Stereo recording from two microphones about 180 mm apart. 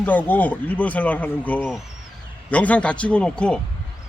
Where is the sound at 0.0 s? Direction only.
10° left (ahead or behind).